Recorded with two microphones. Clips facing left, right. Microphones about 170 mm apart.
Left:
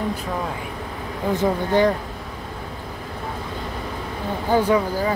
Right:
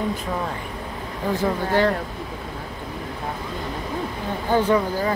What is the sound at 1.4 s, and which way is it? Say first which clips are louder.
Speech: left 2 dB; 15° left (ahead or behind).